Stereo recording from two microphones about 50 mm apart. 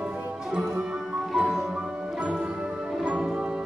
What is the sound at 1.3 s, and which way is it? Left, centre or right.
Music, centre.